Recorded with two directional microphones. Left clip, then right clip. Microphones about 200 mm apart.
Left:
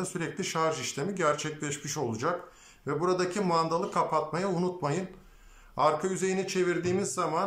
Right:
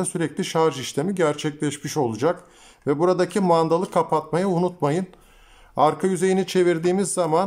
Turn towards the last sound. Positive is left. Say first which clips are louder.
# right 8 dB
turn(degrees=-40)  # may be behind; listen again after turning